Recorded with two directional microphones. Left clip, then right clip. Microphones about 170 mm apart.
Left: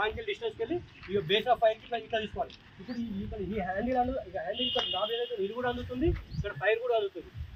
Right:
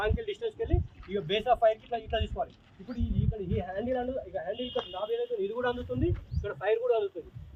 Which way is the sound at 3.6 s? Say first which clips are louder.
Left 4 dB; 20° right (ahead or behind).